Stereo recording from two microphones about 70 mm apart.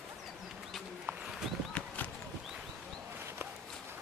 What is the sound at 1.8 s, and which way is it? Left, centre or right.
Clip-clop, centre.